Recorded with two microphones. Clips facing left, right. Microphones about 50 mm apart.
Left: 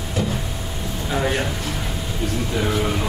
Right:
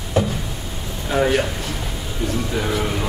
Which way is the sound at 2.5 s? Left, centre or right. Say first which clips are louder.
Left 3 dB; centre.